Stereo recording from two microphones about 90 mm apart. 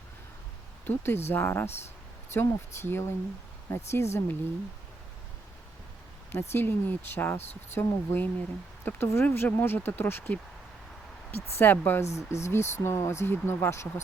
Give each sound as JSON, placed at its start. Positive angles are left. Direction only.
{"t": 0.9, "sound": "speech", "side_deg": 25}
{"t": 6.3, "sound": "speech", "side_deg": 25}